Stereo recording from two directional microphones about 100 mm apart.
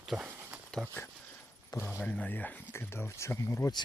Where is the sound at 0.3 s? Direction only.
25° right (ahead or behind).